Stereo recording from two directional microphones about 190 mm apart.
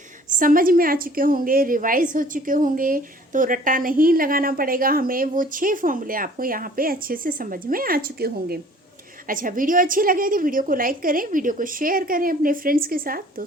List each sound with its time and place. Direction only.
0.3 s a woman's voice: 45° right (ahead or behind)